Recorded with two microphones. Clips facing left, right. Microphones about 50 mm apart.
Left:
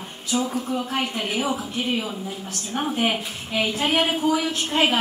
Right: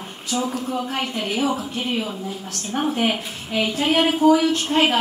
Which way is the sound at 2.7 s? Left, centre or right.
Centre.